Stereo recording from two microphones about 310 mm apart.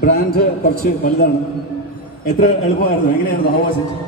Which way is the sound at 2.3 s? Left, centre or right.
Left.